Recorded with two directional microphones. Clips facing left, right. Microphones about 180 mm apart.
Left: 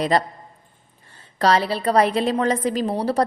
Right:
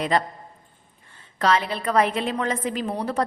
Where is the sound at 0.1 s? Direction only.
35° left (ahead or behind).